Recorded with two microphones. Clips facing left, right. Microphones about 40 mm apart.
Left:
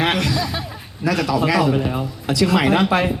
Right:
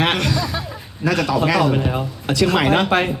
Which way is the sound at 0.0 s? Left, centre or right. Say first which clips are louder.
Even; right.